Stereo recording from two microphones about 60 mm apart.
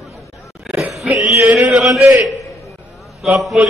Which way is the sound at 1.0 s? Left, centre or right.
Centre.